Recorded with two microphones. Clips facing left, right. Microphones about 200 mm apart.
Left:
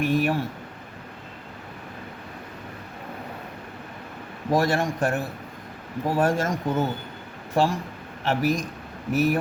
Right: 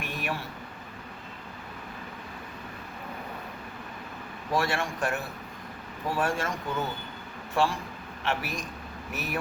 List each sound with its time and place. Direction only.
0.0 s a man's voice: 40° left (ahead or behind)
4.5 s a man's voice: 40° left (ahead or behind)